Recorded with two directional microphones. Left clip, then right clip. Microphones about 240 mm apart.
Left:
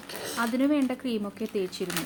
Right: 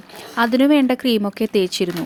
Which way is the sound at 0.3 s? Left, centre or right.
Right.